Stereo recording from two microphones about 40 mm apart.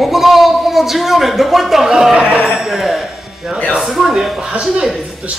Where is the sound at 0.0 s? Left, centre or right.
Centre.